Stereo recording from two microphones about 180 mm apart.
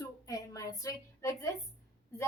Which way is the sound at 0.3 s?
20° left (ahead or behind).